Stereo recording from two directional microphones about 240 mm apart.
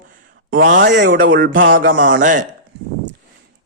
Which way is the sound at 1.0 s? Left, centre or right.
Right.